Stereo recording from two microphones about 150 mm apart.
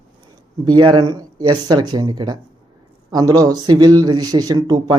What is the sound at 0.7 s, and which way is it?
A man's voice, 30° right (ahead or behind).